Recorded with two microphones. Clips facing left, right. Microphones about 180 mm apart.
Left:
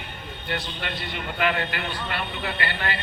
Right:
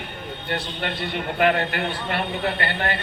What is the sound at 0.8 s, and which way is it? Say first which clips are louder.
A man's voice: right 5 dB; 55° right (ahead or behind).